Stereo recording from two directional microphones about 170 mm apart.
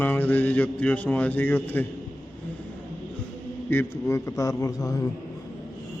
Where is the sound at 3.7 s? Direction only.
15° left (ahead or behind).